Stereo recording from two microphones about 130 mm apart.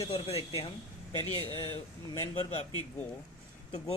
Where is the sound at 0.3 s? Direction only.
50° left (ahead or behind).